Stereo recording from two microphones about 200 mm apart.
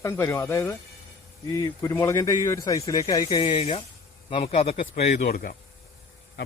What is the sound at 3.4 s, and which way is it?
A man's voice, 30° left (ahead or behind).